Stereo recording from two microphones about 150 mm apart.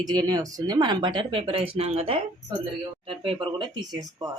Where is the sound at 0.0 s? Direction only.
25° right (ahead or behind).